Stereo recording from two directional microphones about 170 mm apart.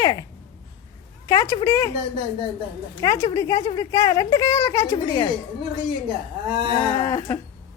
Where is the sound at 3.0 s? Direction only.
20° left (ahead or behind).